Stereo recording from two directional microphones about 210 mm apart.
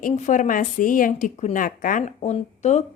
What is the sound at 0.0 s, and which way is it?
Speech, 35° left (ahead or behind).